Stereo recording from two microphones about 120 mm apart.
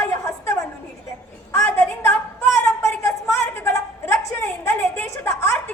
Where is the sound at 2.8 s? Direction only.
20° left (ahead or behind).